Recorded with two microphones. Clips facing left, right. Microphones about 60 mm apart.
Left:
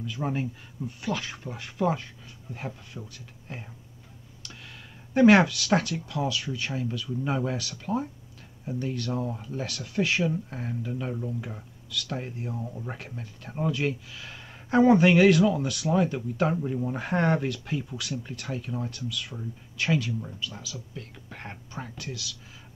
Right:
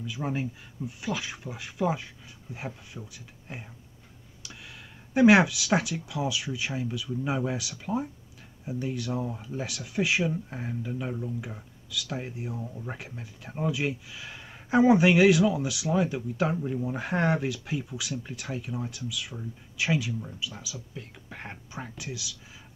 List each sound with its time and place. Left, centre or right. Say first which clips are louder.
0.0 s speech: left 1 dB; centre